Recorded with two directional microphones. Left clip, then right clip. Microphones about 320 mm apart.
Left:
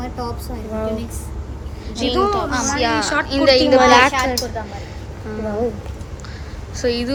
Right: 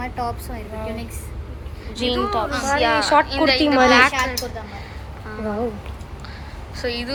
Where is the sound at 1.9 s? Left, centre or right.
Centre.